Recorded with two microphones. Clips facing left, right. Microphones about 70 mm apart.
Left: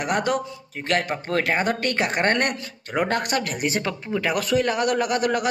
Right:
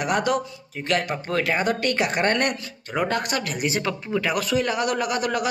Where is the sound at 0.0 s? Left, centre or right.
Left.